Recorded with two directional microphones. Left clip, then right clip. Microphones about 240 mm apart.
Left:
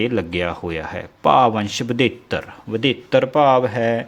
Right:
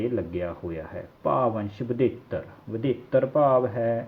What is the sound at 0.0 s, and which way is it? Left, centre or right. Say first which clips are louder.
Speech: left 7 dB; left.